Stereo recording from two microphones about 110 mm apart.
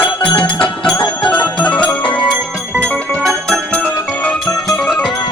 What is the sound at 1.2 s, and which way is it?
Music, 15° left (ahead or behind).